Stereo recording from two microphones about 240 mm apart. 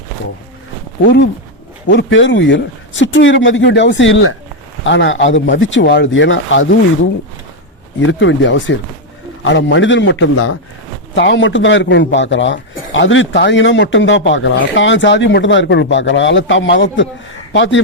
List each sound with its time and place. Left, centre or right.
1.0 s speech: left
8.0 s speech: left
11.1 s speech: left